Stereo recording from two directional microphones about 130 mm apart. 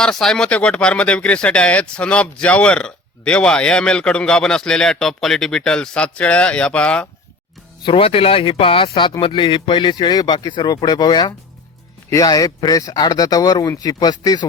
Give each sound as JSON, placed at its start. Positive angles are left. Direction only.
{"t": 0.0, "sound": "speech", "side_deg": 5}
{"t": 7.9, "sound": "speech", "side_deg": 45}